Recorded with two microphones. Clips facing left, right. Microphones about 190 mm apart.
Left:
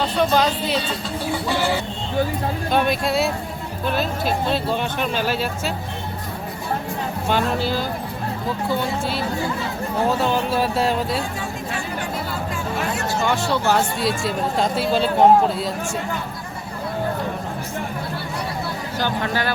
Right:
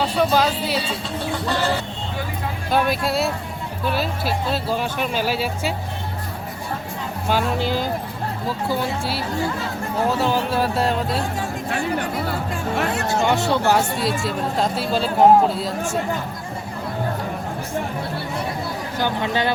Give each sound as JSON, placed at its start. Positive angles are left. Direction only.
{"t": 0.0, "sound": "speech", "side_deg": -5}
{"t": 1.3, "sound": "a sound", "side_deg": 15}
{"t": 2.7, "sound": "speech", "side_deg": -5}
{"t": 7.3, "sound": "speech", "side_deg": -10}
{"t": 10.2, "sound": "speech", "side_deg": 0}
{"t": 13.1, "sound": "speech", "side_deg": -20}
{"t": 14.0, "sound": "speech", "side_deg": 0}
{"t": 18.9, "sound": "speech", "side_deg": -15}